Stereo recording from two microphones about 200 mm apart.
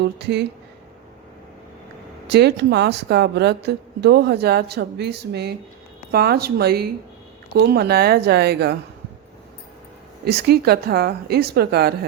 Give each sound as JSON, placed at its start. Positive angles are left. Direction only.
{"t": 0.0, "sound": "a woman's voice", "side_deg": -55}
{"t": 2.2, "sound": "a woman's voice", "side_deg": -55}
{"t": 10.2, "sound": "a woman's voice", "side_deg": -55}